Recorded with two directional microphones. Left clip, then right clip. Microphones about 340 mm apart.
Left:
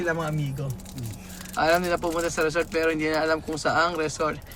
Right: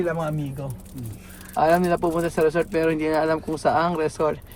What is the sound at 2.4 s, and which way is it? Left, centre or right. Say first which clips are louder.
Speech: right 4 dB; centre.